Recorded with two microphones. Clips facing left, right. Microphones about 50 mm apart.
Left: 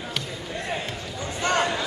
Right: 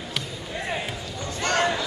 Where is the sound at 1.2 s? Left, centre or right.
Centre.